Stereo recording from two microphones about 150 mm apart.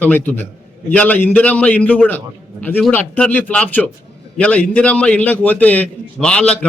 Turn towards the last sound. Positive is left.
turn(degrees=5)  # may be behind; listen again after turning